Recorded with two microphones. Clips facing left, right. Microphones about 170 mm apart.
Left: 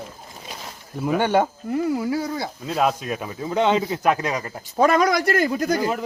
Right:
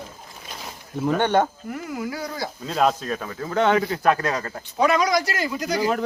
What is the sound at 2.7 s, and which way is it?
A man's voice, 5° left (ahead or behind).